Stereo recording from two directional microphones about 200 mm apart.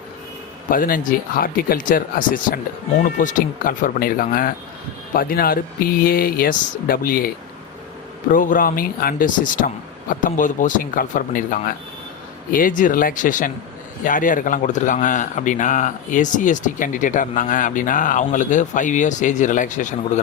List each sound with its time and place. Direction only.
0.7 s speech: 45° left (ahead or behind)
8.3 s a man's voice: 40° left (ahead or behind)